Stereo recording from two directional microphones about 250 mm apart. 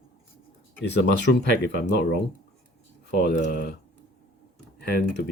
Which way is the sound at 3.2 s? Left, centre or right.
Left.